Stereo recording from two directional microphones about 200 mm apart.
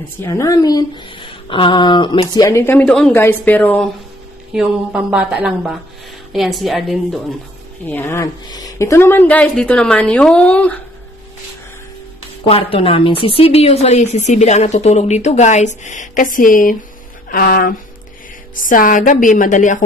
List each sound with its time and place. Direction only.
0.2 s speech: 15° left (ahead or behind)
4.6 s a woman's voice: 5° right (ahead or behind)
12.4 s a woman's voice: 25° left (ahead or behind)